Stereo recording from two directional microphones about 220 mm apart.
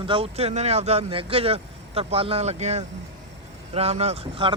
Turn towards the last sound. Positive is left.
turn(degrees=-25)  # may be behind; listen again after turning